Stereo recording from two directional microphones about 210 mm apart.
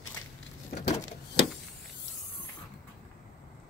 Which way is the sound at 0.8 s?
35° left (ahead or behind).